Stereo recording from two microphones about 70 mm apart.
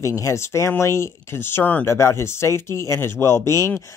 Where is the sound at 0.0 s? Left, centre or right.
Left.